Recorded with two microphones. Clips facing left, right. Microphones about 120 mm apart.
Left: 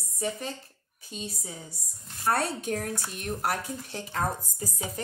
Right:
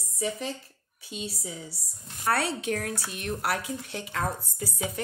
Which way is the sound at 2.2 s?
65° right (ahead or behind).